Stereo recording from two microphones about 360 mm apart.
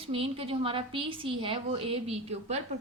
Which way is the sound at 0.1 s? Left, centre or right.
Centre.